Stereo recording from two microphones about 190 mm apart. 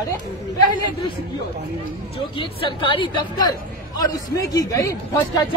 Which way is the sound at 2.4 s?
25° left (ahead or behind).